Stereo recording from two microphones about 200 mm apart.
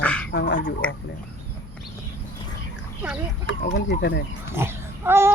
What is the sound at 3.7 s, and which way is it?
Speech, 55° left (ahead or behind).